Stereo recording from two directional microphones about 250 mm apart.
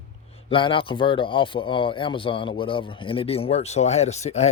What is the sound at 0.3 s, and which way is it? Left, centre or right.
Speech, left.